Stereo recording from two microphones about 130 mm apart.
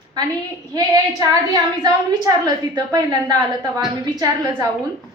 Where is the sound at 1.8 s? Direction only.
30° right (ahead or behind).